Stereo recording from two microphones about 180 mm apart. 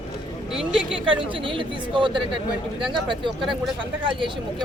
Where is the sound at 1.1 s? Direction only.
30° right (ahead or behind).